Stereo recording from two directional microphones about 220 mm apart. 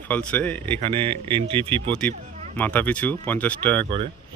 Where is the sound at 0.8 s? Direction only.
25° right (ahead or behind).